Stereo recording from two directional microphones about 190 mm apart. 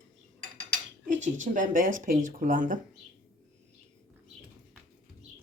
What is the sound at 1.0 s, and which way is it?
Speech, 40° right (ahead or behind).